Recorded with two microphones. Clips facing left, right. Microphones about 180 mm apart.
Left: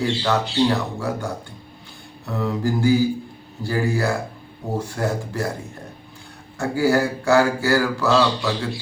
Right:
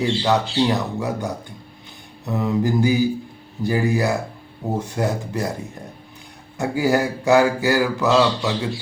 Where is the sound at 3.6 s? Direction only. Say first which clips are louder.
Right 2 dB; 15° right (ahead or behind).